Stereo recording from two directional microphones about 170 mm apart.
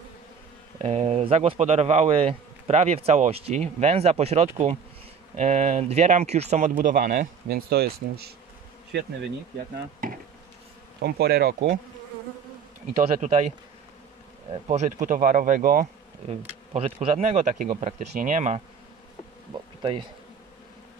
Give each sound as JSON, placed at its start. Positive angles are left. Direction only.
{"t": 0.7, "sound": "speech", "side_deg": -40}
{"t": 8.9, "sound": "bee", "side_deg": -80}
{"t": 10.0, "sound": "insect", "side_deg": -55}
{"t": 11.0, "sound": "bee", "side_deg": -70}
{"t": 13.2, "sound": "speech", "side_deg": -40}
{"t": 14.7, "sound": "speech", "side_deg": -45}
{"t": 16.3, "sound": "speech", "side_deg": -35}
{"t": 19.8, "sound": "bee", "side_deg": -30}